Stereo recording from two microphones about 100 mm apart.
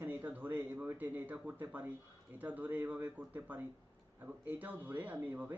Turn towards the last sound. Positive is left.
turn(degrees=-15)  # may be behind; listen again after turning